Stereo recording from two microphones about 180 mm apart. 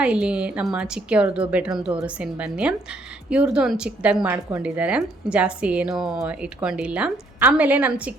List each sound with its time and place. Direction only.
0.0 s a woman's voice: 5° right (ahead or behind)